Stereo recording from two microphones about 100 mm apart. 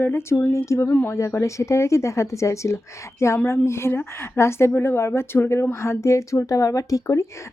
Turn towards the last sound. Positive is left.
turn(degrees=35)  # may be behind; listen again after turning